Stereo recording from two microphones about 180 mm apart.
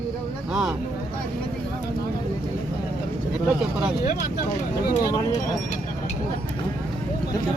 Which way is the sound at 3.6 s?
5° right (ahead or behind).